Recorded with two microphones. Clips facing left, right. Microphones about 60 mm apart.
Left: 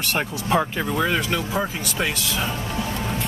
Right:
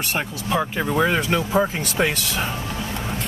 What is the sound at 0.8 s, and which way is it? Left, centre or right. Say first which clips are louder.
Speech: right 3 dB; centre.